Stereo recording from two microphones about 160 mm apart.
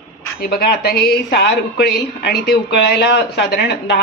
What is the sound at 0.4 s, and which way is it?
A woman's voice, 75° left (ahead or behind).